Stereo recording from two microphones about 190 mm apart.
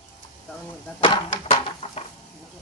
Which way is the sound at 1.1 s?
30° left (ahead or behind).